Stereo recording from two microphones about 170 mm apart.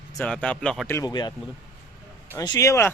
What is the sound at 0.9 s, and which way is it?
Speech, 20° left (ahead or behind).